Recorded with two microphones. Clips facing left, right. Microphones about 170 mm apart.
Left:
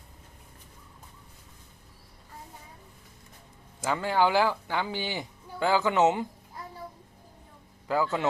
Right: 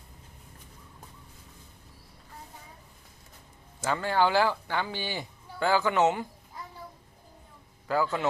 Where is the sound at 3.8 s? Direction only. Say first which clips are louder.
Left 1 dB; 15° left (ahead or behind).